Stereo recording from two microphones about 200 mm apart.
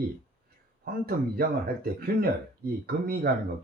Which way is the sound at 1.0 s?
50° right (ahead or behind).